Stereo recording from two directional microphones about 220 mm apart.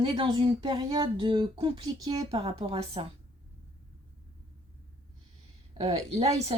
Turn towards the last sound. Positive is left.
turn(degrees=-25)  # may be behind; listen again after turning